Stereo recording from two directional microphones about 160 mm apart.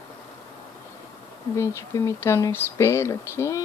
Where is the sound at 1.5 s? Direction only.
20° left (ahead or behind).